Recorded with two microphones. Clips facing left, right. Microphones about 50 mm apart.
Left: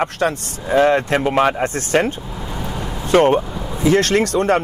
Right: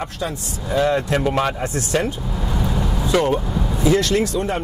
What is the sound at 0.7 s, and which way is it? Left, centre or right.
Speech, left.